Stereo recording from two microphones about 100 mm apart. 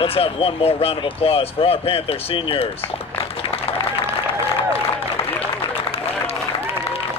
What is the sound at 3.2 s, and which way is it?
Applause, 70° left (ahead or behind).